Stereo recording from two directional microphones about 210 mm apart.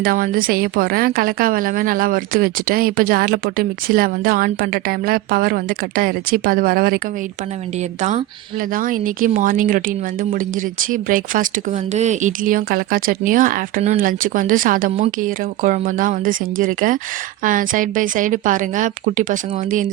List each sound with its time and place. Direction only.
0.0 s a woman's voice: 45° right (ahead or behind)
8.7 s speech: 40° right (ahead or behind)